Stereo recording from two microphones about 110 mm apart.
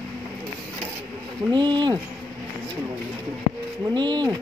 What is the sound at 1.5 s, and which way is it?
Speech, 45° right (ahead or behind).